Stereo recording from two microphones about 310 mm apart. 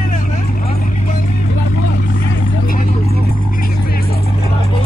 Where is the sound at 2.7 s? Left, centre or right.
Left.